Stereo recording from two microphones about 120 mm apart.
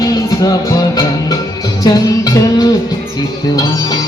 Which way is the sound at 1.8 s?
30° left (ahead or behind).